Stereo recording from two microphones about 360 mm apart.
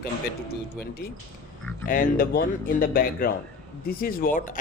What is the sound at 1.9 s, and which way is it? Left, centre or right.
Speech, left.